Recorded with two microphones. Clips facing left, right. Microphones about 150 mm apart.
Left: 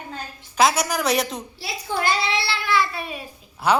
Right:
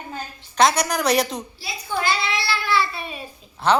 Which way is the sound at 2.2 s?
30° left (ahead or behind).